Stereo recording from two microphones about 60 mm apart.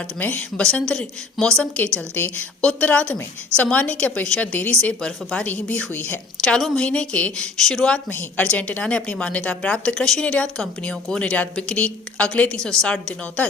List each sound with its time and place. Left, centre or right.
0.2 s a woman's voice: left
0.5 s speech: centre
2.1 s a woman's voice: left
5.9 s a woman's voice: left
6.4 s speech: centre
8.5 s a woman's voice: left
8.8 s speech: centre